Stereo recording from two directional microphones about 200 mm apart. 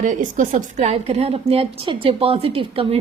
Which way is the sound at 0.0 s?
40° right (ahead or behind).